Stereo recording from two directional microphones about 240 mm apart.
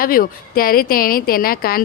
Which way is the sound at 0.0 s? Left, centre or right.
Left.